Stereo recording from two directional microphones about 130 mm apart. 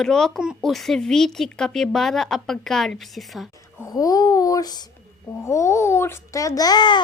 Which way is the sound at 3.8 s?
30° left (ahead or behind).